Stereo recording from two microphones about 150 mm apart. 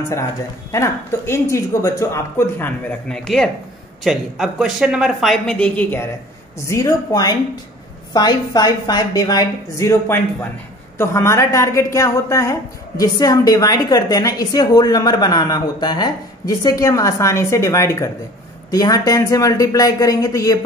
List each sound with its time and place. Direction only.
0.7 s a woman's voice: 20° left (ahead or behind)